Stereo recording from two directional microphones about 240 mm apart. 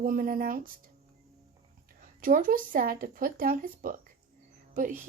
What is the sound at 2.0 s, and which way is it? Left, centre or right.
Speech, right.